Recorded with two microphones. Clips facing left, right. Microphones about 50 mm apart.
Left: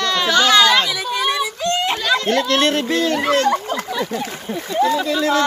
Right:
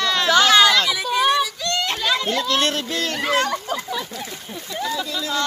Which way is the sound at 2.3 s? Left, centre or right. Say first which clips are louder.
Left 4 dB; left.